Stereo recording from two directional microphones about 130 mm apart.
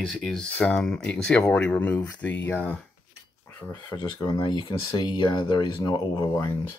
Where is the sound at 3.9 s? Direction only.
40° left (ahead or behind).